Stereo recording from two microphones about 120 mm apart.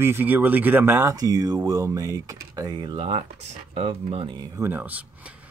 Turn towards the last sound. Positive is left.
turn(degrees=-10)  # may be behind; listen again after turning